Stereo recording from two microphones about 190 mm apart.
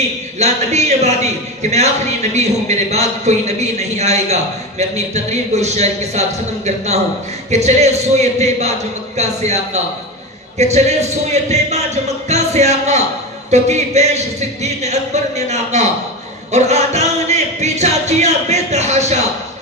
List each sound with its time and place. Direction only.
0.4 s a man's voice: 35° right (ahead or behind)